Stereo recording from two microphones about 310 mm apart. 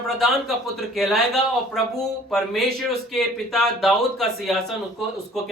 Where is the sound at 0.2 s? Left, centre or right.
Centre.